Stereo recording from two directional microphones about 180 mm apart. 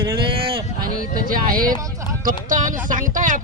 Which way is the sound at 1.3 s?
50° right (ahead or behind).